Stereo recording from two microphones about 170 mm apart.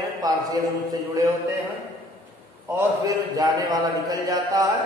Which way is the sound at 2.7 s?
20° right (ahead or behind).